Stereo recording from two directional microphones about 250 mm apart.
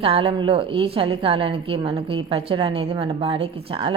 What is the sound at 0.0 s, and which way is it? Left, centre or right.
A woman's voice, right.